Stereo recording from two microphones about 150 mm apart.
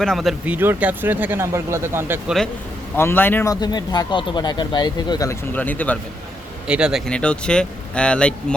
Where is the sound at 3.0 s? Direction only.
15° left (ahead or behind).